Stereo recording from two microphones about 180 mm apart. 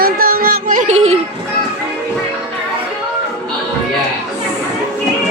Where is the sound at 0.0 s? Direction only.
55° right (ahead or behind); by 1.1 s 40° right (ahead or behind).